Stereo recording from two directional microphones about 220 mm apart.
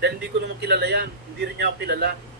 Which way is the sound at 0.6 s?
50° right (ahead or behind).